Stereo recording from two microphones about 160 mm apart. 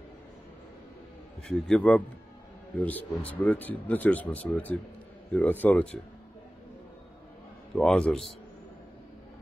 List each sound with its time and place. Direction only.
1.5 s a man's voice: 5° left (ahead or behind)
7.7 s a man's voice: 5° left (ahead or behind)